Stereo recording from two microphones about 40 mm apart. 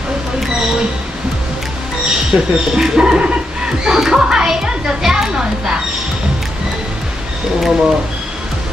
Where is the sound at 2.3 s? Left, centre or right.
Right.